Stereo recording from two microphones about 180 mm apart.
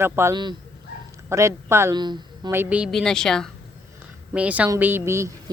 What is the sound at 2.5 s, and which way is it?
Speech, 10° right (ahead or behind).